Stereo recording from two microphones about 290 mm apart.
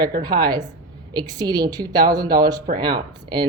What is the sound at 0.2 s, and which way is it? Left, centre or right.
Speech, centre.